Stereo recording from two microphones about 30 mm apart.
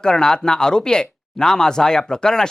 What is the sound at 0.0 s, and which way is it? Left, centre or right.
Speech, left.